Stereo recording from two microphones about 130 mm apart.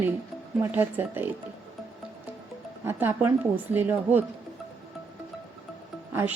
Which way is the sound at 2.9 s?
15° right (ahead or behind).